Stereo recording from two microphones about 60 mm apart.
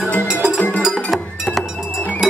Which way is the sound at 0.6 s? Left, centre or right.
Left.